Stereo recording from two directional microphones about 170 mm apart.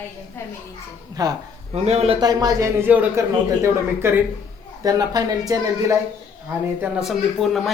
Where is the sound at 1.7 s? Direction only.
40° right (ahead or behind).